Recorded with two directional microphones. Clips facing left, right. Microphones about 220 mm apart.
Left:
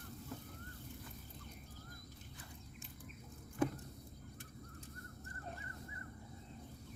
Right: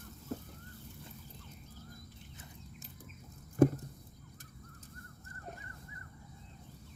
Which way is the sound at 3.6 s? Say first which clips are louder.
Right 10 dB; 40° right (ahead or behind).